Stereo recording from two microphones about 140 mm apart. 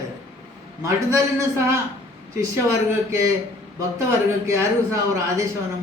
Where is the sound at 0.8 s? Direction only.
20° right (ahead or behind).